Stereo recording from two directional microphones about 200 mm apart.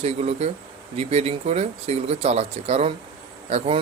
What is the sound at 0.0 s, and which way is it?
Speech, 30° right (ahead or behind).